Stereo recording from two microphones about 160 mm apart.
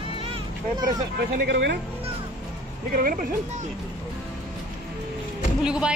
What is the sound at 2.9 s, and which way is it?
Speech, 65° right (ahead or behind).